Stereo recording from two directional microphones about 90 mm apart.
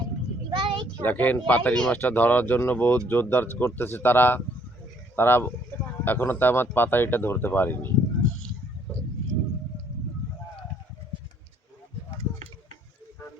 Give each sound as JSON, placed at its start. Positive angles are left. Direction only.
{"t": 0.5, "sound": "child singing", "side_deg": -70}
{"t": 1.0, "sound": "speech", "side_deg": 20}